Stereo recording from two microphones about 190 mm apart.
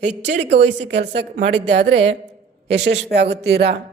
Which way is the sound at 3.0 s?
60° right (ahead or behind).